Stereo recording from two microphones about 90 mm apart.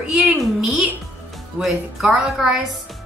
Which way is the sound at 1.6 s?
Centre (ahead or behind).